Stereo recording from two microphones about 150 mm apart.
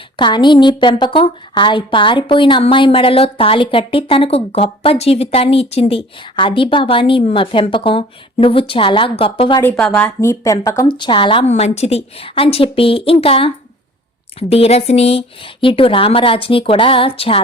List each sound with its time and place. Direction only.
0.2 s a woman's voice: 30° left (ahead or behind)
9.6 s speech: 10° left (ahead or behind)
10.8 s a woman's voice: 30° left (ahead or behind)